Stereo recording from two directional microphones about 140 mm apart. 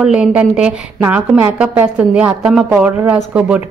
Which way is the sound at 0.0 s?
5° right (ahead or behind).